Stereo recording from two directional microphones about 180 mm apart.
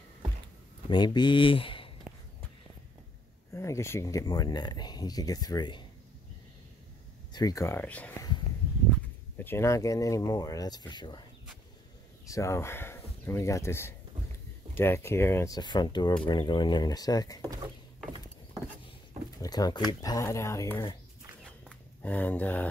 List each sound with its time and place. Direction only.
0.8 s speech: 25° left (ahead or behind)
3.5 s speech: 15° left (ahead or behind)
7.3 s speech: 20° left (ahead or behind)
9.4 s speech: 15° left (ahead or behind)
12.3 s speech: 15° left (ahead or behind)
19.4 s speech: 20° left (ahead or behind)
21.5 s a sound: 5° left (ahead or behind)